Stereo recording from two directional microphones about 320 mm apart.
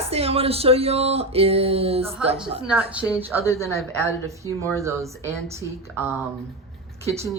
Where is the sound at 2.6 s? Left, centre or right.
Centre.